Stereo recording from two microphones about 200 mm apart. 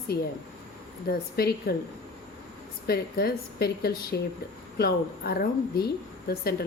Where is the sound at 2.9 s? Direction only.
50° left (ahead or behind).